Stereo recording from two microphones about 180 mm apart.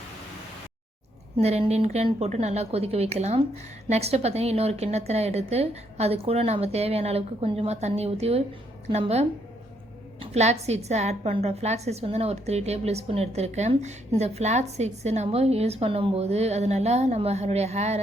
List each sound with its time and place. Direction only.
1.4 s a woman's voice: 35° right (ahead or behind)